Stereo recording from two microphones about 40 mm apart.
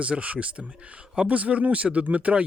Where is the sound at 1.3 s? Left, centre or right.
Right.